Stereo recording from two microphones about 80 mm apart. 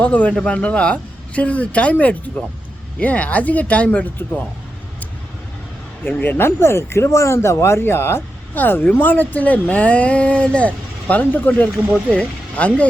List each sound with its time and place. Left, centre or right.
0.0 s speech: centre
6.1 s speech: left